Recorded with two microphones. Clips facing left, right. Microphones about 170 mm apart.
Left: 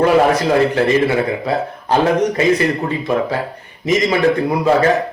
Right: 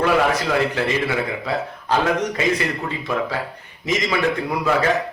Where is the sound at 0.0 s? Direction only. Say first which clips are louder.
Left 6 dB; 40° left (ahead or behind).